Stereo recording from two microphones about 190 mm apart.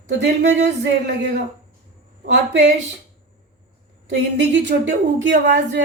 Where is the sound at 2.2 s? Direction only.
65° right (ahead or behind).